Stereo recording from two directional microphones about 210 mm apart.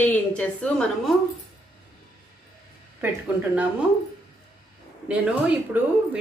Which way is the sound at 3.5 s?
5° right (ahead or behind).